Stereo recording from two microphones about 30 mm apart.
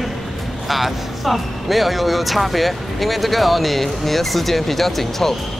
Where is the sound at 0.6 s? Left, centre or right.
Centre.